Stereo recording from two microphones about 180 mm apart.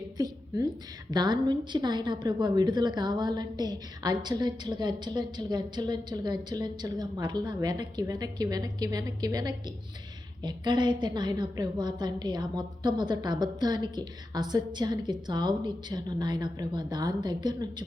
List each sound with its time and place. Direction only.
0.2 s a woman's voice: 20° right (ahead or behind)